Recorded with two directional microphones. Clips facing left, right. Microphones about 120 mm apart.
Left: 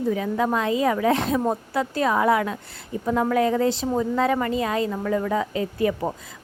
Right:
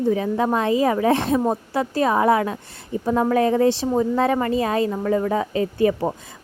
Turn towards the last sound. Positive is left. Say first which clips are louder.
# right 4 dB
turn(degrees=-30)  # may be behind; listen again after turning